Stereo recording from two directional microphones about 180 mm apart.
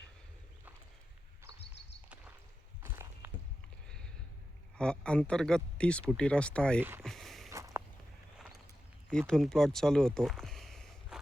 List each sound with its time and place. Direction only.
2.8 s walk: 15° right (ahead or behind)
3.8 s a sound: 5° left (ahead or behind)
4.8 s speech: 5° left (ahead or behind)
6.7 s speech: 10° right (ahead or behind)
7.0 s a sound: centre (ahead or behind)
7.5 s walk: 15° right (ahead or behind)
9.0 s speech: 5° left (ahead or behind)